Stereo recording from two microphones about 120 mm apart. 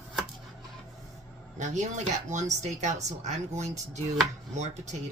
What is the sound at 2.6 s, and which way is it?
Speech, 75° right (ahead or behind).